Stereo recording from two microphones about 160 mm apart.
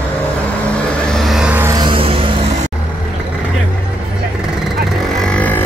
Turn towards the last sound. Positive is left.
turn(degrees=10)  # may be behind; listen again after turning